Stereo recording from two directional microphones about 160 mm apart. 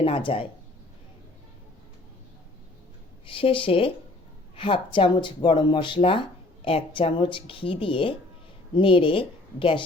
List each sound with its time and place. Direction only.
0.0 s speech: 35° left (ahead or behind)
3.2 s speech: 35° left (ahead or behind)